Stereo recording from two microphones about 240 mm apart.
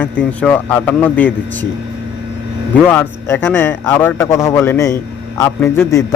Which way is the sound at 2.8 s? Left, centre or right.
Centre.